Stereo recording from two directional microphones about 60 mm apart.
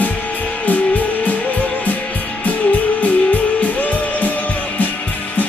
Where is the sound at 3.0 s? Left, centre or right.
Left.